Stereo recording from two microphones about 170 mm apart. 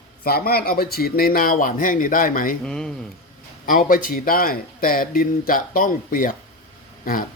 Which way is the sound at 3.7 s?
55° left (ahead or behind).